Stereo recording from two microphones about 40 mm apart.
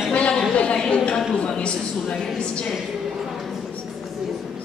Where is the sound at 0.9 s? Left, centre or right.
Left.